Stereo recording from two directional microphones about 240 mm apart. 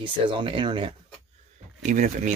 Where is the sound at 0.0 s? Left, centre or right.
Right.